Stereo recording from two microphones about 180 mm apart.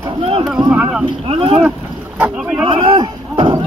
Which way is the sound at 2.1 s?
10° right (ahead or behind).